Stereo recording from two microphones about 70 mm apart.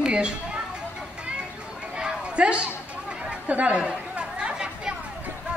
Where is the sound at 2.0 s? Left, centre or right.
Centre.